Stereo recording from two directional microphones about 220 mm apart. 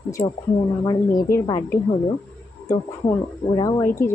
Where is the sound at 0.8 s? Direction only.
20° left (ahead or behind).